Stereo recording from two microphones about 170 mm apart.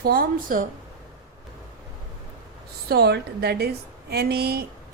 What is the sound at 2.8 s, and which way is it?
A woman's voice, 70° right (ahead or behind).